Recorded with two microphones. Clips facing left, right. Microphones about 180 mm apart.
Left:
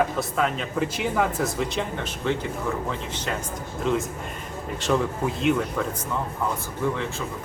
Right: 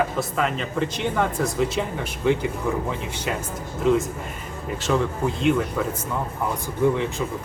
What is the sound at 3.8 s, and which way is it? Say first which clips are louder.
A man's voice: right 5 dB; 5° right (ahead or behind).